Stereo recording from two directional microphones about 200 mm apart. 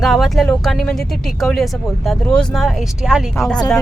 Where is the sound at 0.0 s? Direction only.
Centre (ahead or behind).